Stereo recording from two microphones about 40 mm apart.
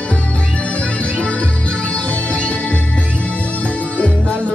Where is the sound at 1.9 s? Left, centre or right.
Left.